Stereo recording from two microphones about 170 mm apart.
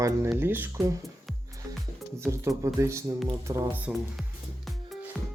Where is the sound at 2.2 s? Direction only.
15° right (ahead or behind).